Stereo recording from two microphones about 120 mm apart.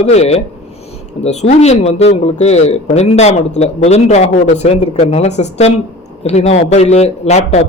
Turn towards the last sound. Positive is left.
turn(degrees=65)  # may be behind; listen again after turning